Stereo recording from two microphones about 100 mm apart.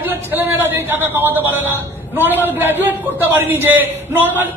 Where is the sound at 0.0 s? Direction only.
20° right (ahead or behind).